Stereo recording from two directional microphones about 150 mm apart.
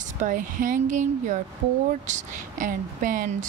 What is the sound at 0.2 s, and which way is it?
Speech, 60° right (ahead or behind).